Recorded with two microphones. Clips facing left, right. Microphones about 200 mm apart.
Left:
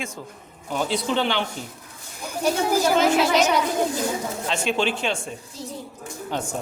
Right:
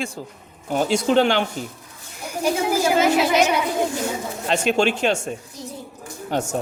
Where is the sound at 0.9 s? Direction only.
45° right (ahead or behind).